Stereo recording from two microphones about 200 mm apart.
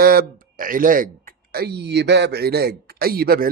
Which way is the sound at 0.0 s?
45° right (ahead or behind).